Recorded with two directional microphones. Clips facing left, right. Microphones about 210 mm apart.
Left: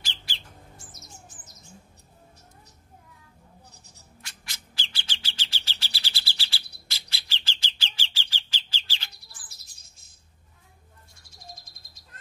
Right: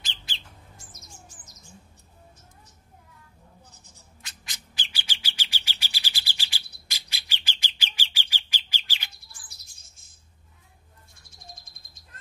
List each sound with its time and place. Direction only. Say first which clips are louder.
0.0 s bird: left 1 dB; 20° right (ahead or behind)
3.7 s writing: even; 50° right (ahead or behind)
4.2 s bird: even; 15° right (ahead or behind)
11.2 s bird: left 2 dB; 50° right (ahead or behind)